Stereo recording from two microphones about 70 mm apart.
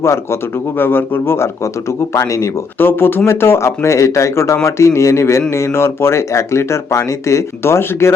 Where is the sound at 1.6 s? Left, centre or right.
Left.